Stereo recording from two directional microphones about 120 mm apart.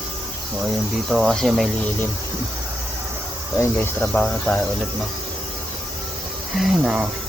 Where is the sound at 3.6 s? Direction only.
15° left (ahead or behind).